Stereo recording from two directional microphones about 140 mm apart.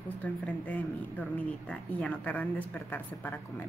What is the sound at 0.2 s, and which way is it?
Speech, 10° left (ahead or behind).